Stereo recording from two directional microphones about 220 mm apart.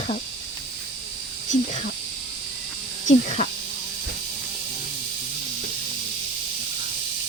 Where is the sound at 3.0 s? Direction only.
30° left (ahead or behind).